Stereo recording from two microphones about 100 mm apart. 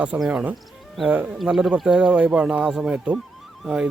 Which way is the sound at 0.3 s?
10° right (ahead or behind).